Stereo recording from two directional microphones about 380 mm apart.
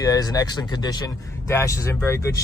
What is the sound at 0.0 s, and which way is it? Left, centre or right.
Speech, centre.